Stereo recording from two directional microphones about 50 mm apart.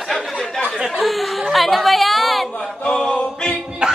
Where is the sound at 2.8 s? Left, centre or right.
Centre.